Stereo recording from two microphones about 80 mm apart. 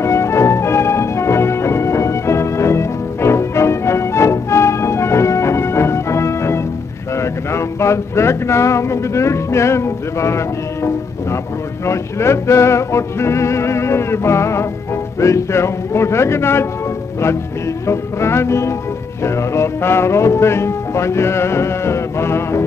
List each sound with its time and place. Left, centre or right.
0.0 s music: left
7.2 s speech: left
11.8 s music: left
17.8 s music: left